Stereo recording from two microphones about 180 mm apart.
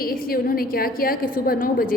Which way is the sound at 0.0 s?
55° left (ahead or behind).